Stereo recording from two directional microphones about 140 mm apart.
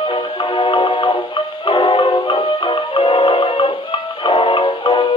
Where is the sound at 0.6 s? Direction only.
40° left (ahead or behind).